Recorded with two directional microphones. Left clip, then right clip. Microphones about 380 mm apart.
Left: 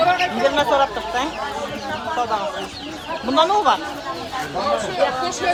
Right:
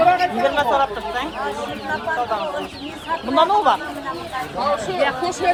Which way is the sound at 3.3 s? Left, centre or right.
Centre.